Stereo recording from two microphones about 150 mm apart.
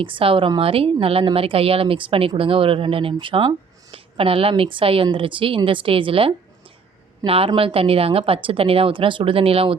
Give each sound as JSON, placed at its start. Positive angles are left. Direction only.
{"t": 0.0, "sound": "speech", "side_deg": -35}